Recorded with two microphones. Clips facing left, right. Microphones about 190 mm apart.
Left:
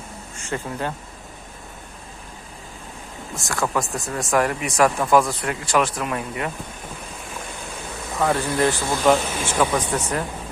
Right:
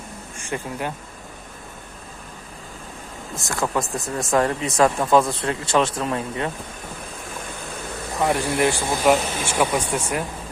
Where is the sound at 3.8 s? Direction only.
Centre (ahead or behind).